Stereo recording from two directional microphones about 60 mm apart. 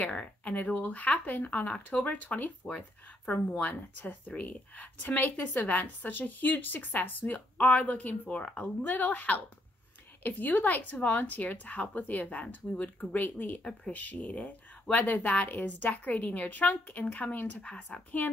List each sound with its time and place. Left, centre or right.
0.0 s speech: left